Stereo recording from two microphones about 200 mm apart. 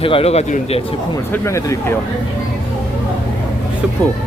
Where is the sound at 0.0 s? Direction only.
30° left (ahead or behind).